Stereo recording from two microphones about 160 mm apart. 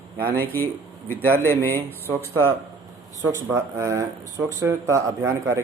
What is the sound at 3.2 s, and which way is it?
A man's voice, 20° right (ahead or behind).